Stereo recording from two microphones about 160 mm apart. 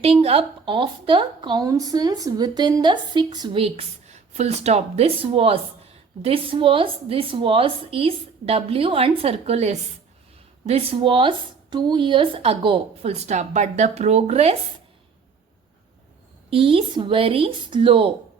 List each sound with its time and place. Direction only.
0.0 s a woman's voice: 35° right (ahead or behind)
16.5 s a woman's voice: 35° right (ahead or behind)